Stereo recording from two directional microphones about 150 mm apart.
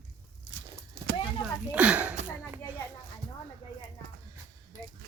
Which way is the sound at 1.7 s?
10° right (ahead or behind).